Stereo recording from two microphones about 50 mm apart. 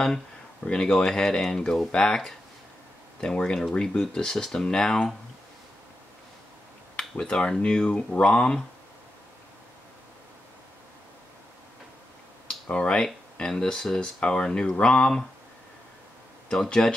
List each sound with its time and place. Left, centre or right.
0.7 s speech: centre
7.0 s speech: centre
12.4 s a sound: centre
13.4 s speech: centre
16.4 s speech: centre